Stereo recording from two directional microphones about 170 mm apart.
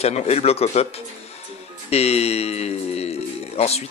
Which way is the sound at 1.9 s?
40° left (ahead or behind).